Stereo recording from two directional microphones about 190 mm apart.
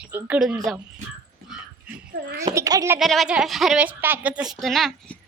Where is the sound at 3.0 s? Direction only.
Centre (ahead or behind).